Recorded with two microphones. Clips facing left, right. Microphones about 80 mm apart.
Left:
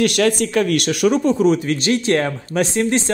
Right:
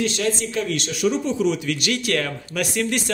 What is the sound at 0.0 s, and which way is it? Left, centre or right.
Speech, left.